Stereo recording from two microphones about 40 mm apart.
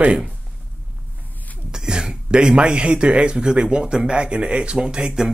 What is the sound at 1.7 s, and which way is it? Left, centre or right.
Speech, centre.